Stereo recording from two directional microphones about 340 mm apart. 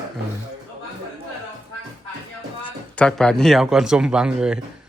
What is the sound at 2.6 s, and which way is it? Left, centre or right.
A man's voice, centre.